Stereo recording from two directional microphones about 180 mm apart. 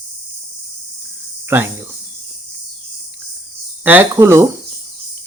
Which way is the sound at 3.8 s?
10° right (ahead or behind).